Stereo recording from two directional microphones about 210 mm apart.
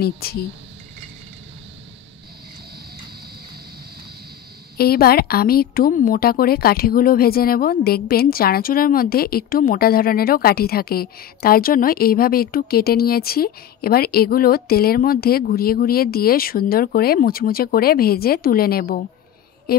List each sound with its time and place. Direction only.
0.0 s a woman's voice: 45° left (ahead or behind)
4.7 s a woman's voice: 45° left (ahead or behind)